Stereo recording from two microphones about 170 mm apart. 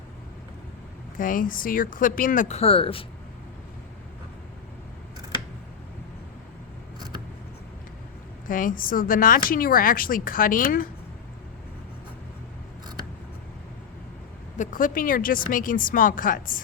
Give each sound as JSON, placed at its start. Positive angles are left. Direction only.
{"t": 1.1, "sound": "speech", "side_deg": 55}
{"t": 8.4, "sound": "speech", "side_deg": 55}
{"t": 14.6, "sound": "speech", "side_deg": 50}